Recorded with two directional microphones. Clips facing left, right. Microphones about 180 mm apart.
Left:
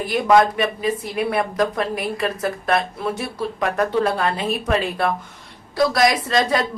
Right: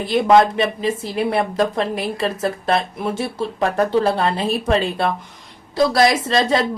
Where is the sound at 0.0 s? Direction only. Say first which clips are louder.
Right 2 dB; 25° right (ahead or behind).